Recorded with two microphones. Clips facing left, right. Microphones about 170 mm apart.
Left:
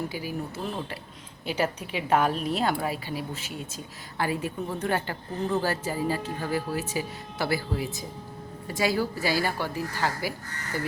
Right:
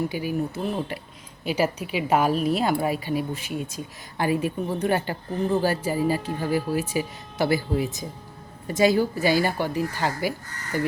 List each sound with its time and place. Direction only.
0.1 s a woman's voice: 15° right (ahead or behind)